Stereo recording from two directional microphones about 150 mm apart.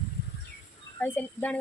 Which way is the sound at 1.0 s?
10° left (ahead or behind).